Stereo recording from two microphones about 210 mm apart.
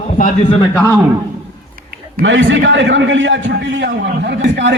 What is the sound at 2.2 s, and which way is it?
A man's voice, 60° right (ahead or behind).